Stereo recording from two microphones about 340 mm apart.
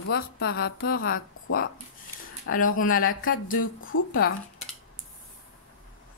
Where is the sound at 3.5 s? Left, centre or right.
Left.